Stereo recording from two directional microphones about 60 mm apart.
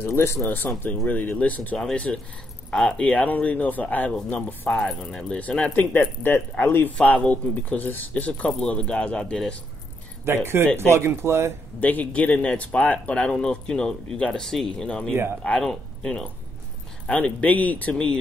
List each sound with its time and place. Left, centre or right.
0.0 s speech: left
2.1 s speech: centre
4.7 s speech: centre
5.8 s speech: left; by 9.4 s centre
10.2 s speech: right
11.8 s speech: left; by 16.3 s centre
17.0 s speech: left